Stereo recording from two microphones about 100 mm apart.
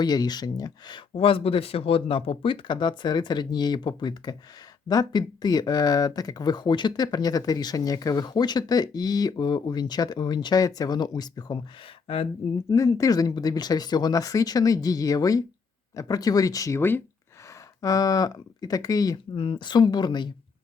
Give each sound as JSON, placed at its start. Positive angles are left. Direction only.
{"t": 0.0, "sound": "speech", "side_deg": 45}
{"t": 1.1, "sound": "speech", "side_deg": 70}
{"t": 12.0, "sound": "speech", "side_deg": 70}
{"t": 12.7, "sound": "speech", "side_deg": 35}
{"t": 19.4, "sound": "speech", "side_deg": 55}